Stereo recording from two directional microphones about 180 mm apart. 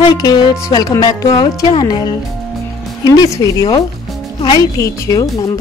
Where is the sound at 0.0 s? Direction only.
25° left (ahead or behind).